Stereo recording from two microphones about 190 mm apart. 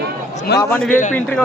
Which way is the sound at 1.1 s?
5° left (ahead or behind).